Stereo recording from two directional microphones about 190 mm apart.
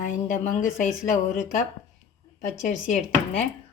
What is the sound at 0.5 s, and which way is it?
Speech, 40° left (ahead or behind).